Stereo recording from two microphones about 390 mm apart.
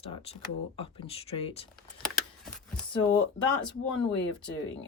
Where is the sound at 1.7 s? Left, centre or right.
Centre.